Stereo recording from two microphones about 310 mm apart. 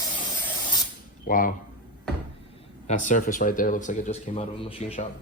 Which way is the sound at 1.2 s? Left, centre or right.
Left.